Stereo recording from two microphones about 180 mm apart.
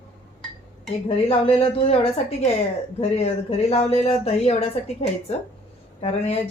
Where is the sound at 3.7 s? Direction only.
35° left (ahead or behind).